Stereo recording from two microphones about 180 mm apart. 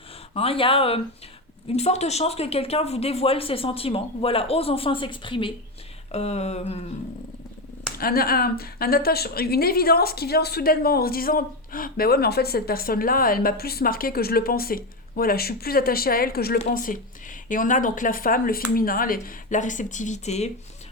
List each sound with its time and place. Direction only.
0.3 s speech: 30° left (ahead or behind)
7.9 s a woman's voice: 55° left (ahead or behind); by 20.5 s 40° left (ahead or behind)